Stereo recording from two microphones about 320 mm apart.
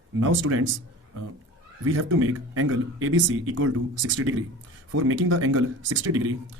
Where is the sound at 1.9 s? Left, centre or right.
Right.